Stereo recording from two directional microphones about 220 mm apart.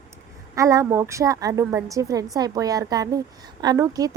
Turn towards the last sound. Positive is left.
turn(degrees=-15)  # may be behind; listen again after turning